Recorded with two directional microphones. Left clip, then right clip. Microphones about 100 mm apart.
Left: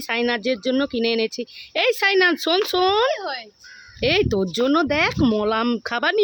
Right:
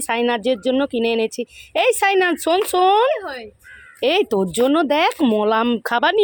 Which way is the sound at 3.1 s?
60° left (ahead or behind).